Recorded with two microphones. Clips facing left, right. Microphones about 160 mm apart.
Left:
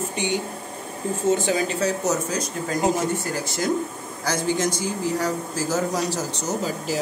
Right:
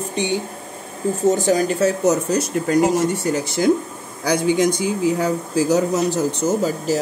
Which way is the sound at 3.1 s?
85° right.